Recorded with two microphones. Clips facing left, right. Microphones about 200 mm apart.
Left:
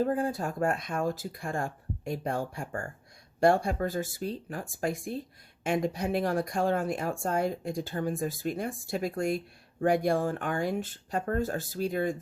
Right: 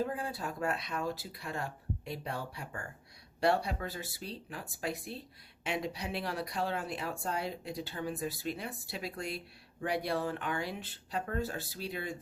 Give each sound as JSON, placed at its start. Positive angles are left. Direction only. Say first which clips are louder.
{"t": 0.0, "sound": "speech", "louder": "left 7 dB", "side_deg": 45}